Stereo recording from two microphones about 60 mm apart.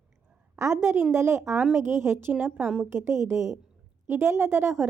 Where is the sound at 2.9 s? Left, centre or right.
Right.